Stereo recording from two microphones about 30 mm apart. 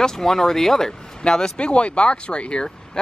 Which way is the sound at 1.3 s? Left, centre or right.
Left.